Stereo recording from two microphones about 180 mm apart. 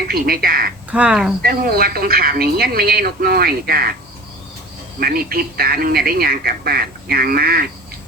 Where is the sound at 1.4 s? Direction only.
55° right (ahead or behind).